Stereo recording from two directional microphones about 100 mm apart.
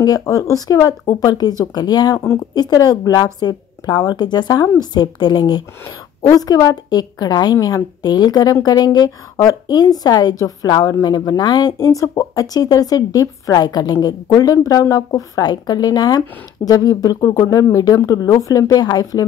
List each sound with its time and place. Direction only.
0.0 s a woman's voice: 40° left (ahead or behind)
2.1 s speech: 25° left (ahead or behind)
2.5 s a woman's voice: 40° left (ahead or behind)